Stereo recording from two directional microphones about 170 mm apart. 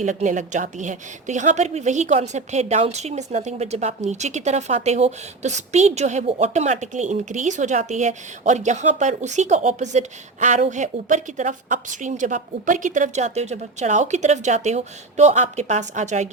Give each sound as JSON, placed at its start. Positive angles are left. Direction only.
{"t": 0.0, "sound": "a woman's voice", "side_deg": -45}